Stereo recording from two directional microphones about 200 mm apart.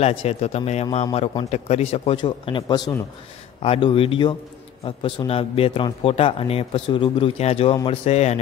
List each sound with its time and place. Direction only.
0.0 s a man's voice: 30° left (ahead or behind)